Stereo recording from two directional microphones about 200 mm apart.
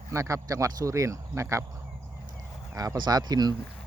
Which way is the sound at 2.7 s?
20° right (ahead or behind).